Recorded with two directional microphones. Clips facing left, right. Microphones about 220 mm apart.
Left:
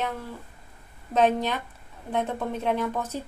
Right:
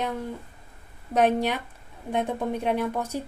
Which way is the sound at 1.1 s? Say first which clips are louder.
Right 1 dB; 10° right (ahead or behind).